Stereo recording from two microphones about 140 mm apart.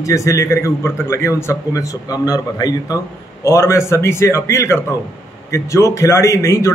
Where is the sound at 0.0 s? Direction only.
20° left (ahead or behind).